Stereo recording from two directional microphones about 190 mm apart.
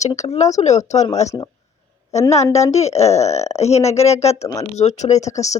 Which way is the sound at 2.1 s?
15° left (ahead or behind).